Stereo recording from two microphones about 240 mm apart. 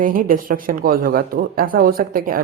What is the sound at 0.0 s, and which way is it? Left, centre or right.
A woman's voice, right.